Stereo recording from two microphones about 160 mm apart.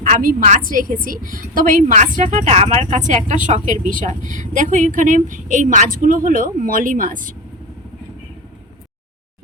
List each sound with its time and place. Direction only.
0.0 s a woman's voice: 60° right (ahead or behind)